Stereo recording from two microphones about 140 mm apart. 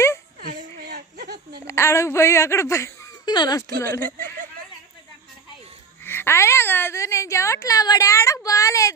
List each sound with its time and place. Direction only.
0.3 s a sound: 90° right
1.6 s speech: 20° left (ahead or behind)
3.8 s a woman's voice: 20° left (ahead or behind)
6.0 s a woman's voice: 15° left (ahead or behind)